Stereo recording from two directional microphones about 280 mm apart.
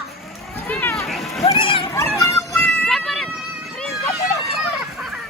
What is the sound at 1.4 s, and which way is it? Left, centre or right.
Speech, centre.